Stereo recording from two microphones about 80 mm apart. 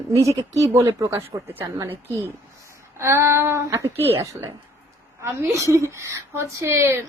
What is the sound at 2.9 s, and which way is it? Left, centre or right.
Speech, right.